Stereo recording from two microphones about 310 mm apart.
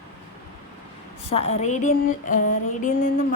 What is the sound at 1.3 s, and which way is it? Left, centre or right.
A woman's voice, centre.